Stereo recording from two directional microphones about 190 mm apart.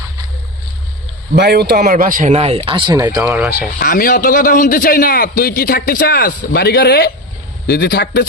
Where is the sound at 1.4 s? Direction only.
60° right (ahead or behind).